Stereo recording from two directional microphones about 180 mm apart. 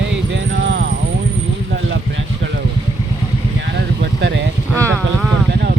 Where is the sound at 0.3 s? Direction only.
90° right.